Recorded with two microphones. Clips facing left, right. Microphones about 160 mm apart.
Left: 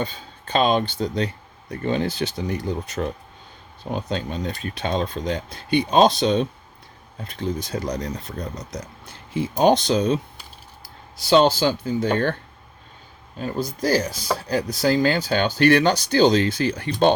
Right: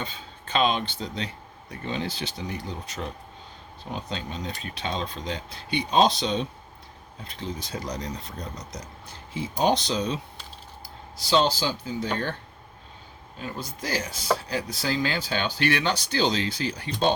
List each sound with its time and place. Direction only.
0.0 s speech: 40° left (ahead or behind)
11.3 s speech: 60° left (ahead or behind)
13.4 s speech: 40° left (ahead or behind); by 17.1 s 55° left (ahead or behind)